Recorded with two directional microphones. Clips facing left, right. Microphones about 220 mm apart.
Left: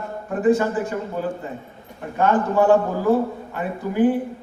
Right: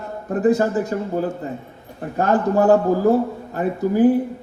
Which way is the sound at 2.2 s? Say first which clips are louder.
Right 1 dB; 40° right (ahead or behind).